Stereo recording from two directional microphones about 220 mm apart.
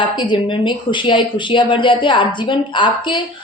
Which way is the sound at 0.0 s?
20° left (ahead or behind).